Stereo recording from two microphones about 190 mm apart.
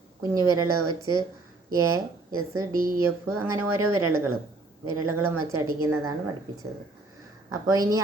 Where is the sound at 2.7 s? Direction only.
50° right (ahead or behind).